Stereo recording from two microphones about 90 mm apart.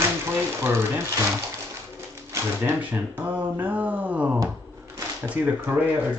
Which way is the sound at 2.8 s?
20° right (ahead or behind).